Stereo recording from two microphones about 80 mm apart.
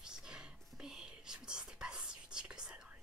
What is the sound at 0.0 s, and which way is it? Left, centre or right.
Whispering, centre.